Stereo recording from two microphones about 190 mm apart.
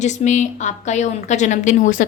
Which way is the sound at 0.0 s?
40° left (ahead or behind).